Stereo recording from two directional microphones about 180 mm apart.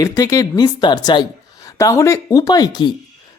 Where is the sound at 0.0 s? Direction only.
20° left (ahead or behind).